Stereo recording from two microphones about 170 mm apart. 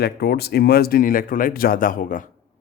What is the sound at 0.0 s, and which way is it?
Speech, 70° left (ahead or behind).